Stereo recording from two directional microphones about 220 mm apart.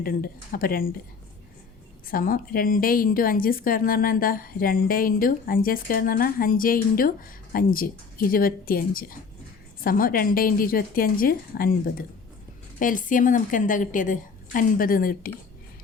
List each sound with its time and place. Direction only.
0.0 s a woman's voice: 40° left (ahead or behind)
2.0 s a woman's voice: 40° left (ahead or behind)